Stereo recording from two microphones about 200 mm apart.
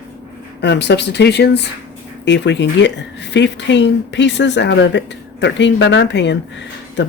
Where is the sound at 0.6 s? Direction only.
60° left (ahead or behind).